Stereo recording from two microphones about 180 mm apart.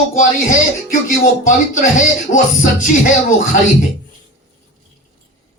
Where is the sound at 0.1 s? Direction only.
45° left (ahead or behind).